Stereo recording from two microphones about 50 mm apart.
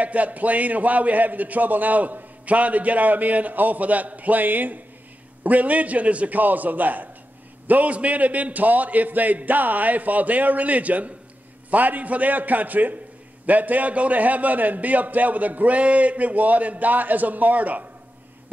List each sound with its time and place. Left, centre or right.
0.0 s a man's voice: right